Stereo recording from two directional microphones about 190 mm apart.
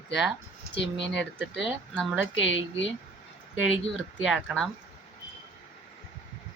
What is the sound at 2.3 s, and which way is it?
Speech, 75° left (ahead or behind).